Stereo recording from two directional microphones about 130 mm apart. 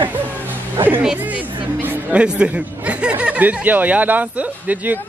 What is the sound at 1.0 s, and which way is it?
Speech, 10° right (ahead or behind).